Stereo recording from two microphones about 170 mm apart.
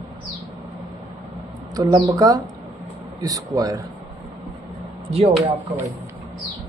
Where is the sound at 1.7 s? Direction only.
20° right (ahead or behind).